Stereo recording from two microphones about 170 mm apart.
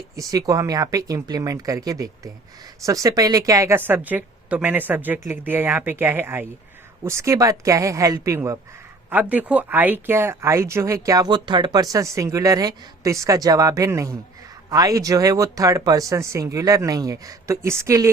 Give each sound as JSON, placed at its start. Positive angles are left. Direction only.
{"t": 0.2, "sound": "speech", "side_deg": -20}